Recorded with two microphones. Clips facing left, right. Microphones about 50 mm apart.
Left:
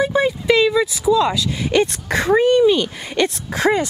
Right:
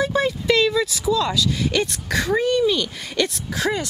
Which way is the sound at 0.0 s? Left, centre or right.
Centre.